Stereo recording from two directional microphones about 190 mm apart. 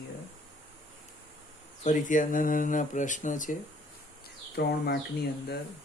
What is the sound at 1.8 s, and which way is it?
Speech, 40° left (ahead or behind).